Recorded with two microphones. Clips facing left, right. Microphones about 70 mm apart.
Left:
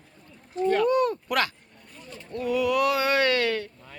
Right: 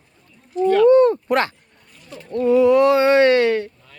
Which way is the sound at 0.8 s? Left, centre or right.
Right.